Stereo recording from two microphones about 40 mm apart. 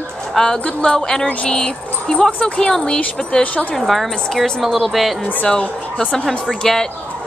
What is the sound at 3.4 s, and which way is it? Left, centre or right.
Speech, left.